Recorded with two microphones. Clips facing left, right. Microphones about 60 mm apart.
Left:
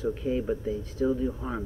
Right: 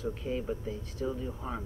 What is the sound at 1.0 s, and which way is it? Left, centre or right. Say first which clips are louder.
Speech: left 8 dB; centre.